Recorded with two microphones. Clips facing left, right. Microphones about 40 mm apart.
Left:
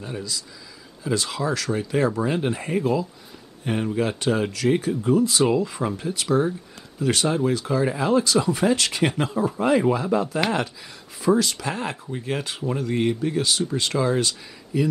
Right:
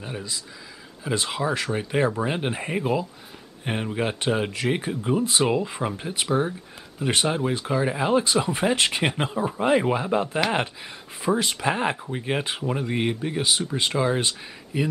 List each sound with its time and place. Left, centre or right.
0.0 s speech: right